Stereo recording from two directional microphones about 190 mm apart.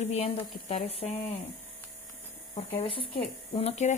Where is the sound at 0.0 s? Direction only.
35° left (ahead or behind).